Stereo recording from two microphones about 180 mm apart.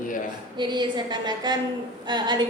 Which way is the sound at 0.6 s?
25° right (ahead or behind).